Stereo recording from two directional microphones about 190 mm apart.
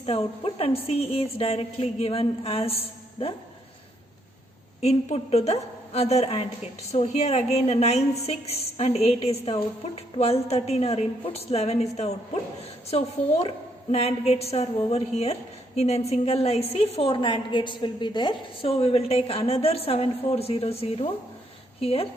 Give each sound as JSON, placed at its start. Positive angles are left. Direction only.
{"t": 0.0, "sound": "a woman's voice", "side_deg": 30}
{"t": 4.8, "sound": "a woman's voice", "side_deg": 35}